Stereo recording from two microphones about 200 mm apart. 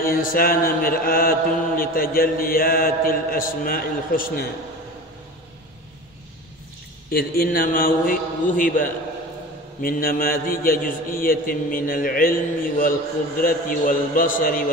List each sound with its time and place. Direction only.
0.0 s a man's voice: 45° left (ahead or behind)
7.1 s a man's voice: 50° left (ahead or behind)